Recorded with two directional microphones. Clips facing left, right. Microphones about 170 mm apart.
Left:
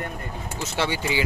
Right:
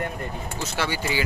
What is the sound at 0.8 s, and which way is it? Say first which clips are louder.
Speech: left 2 dB; 20° left (ahead or behind).